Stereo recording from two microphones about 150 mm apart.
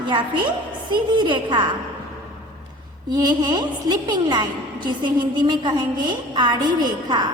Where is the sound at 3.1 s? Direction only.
25° right (ahead or behind).